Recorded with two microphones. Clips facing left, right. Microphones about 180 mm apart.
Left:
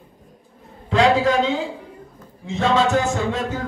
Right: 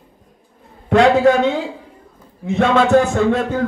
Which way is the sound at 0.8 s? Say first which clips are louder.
Right 5 dB; 65° right (ahead or behind).